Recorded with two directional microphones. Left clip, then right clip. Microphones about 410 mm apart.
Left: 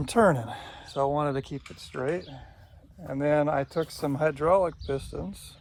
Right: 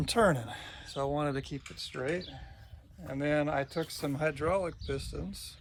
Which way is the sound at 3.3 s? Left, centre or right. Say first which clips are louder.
Left 6 dB; centre.